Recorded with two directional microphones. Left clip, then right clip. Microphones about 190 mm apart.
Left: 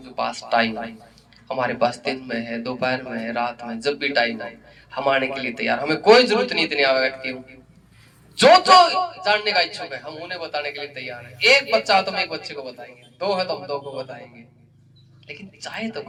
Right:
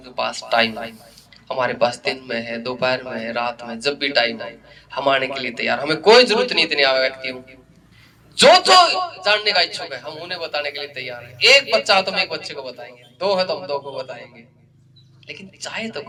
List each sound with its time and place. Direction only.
0.0 s speech: 15° right (ahead or behind)
8.4 s speech: 15° right (ahead or behind)
15.3 s speech: 15° right (ahead or behind)